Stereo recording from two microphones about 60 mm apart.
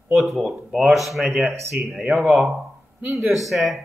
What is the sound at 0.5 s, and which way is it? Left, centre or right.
Speech, centre.